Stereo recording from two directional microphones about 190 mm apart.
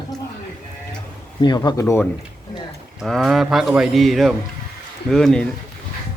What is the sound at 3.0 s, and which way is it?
Speech, centre (ahead or behind).